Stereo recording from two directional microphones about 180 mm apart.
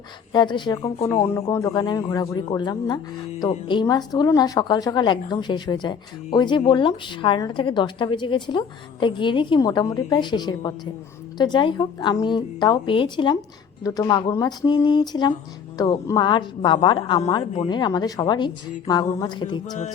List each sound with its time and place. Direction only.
0.3 s speech: 25° left (ahead or behind)